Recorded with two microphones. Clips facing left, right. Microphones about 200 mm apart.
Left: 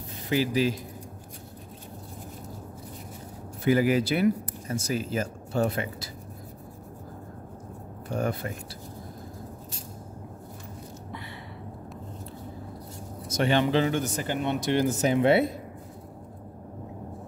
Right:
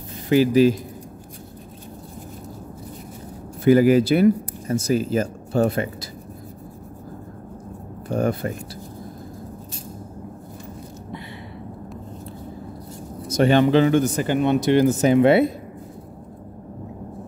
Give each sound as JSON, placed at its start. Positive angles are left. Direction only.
{"t": 0.3, "sound": "speech", "side_deg": -50}
{"t": 3.6, "sound": "speech", "side_deg": -45}
{"t": 8.1, "sound": "speech", "side_deg": -40}
{"t": 13.3, "sound": "speech", "side_deg": -45}